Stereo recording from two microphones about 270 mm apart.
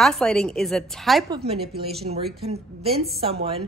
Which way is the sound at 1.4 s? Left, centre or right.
Right.